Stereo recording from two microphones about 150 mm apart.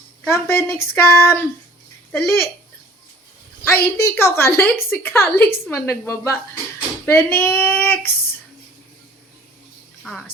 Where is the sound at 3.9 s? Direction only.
20° left (ahead or behind).